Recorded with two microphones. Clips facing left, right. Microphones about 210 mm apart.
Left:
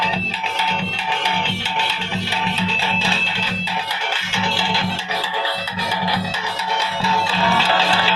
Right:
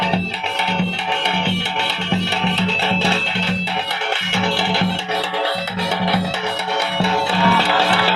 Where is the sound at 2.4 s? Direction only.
70° right (ahead or behind).